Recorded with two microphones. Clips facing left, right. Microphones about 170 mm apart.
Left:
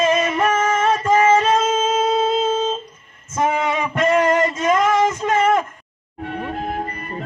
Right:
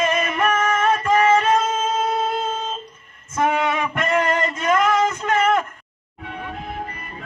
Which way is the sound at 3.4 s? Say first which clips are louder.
Left 1 dB; 20° left (ahead or behind).